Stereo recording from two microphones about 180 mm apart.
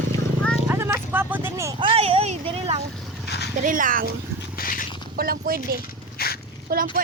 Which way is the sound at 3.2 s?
65° left (ahead or behind).